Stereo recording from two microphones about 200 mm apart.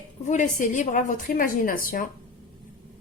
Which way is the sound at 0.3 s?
40° left (ahead or behind).